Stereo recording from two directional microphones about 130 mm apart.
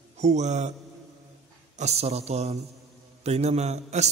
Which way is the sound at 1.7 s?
55° right (ahead or behind).